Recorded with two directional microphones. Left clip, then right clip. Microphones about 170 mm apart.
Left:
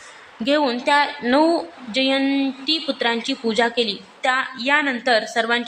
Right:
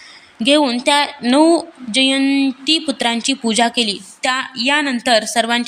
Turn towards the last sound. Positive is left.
turn(degrees=-45)  # may be behind; listen again after turning